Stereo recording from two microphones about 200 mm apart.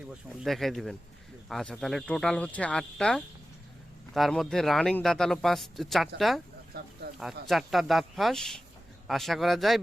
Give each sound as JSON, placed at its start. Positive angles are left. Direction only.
{"t": 0.4, "sound": "speech", "side_deg": 0}
{"t": 6.7, "sound": "speech", "side_deg": -50}
{"t": 7.4, "sound": "speech", "side_deg": 0}